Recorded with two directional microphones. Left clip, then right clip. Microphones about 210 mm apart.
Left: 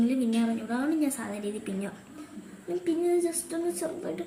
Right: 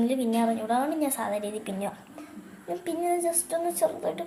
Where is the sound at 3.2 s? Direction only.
10° left (ahead or behind).